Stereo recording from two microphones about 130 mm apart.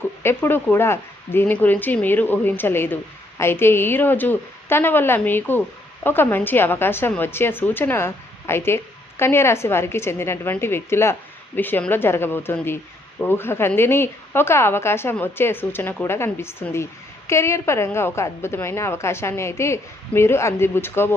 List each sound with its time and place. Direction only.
0.2 s speech: 15° left (ahead or behind)